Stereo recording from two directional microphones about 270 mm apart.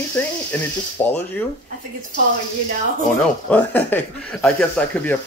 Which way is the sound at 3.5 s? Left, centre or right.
Centre.